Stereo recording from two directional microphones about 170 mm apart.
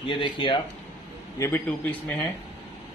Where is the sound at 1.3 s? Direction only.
15° left (ahead or behind).